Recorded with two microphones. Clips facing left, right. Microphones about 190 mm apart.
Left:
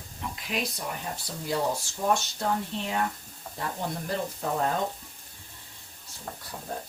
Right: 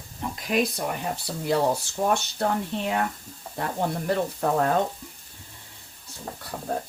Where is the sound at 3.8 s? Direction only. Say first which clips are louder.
Right 7 dB; 60° right (ahead or behind).